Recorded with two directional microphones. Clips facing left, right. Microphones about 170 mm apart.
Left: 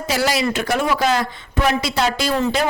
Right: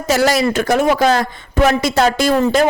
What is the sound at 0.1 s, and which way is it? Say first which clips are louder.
A man's voice: right 6 dB; 45° right (ahead or behind).